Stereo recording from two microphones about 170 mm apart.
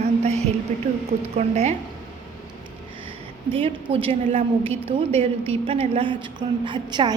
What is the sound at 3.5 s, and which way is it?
A woman's voice, 35° right (ahead or behind).